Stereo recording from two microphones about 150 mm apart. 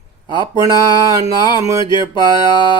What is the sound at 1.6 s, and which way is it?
Music, 20° right (ahead or behind).